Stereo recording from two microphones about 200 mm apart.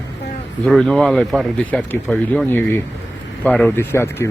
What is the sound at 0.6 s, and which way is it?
Speech, centre (ahead or behind).